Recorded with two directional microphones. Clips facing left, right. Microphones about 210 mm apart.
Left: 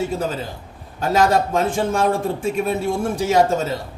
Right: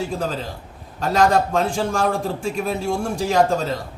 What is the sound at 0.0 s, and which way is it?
A man's voice, 5° left (ahead or behind).